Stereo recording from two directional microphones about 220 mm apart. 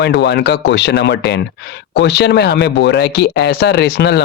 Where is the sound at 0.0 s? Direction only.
50° left (ahead or behind).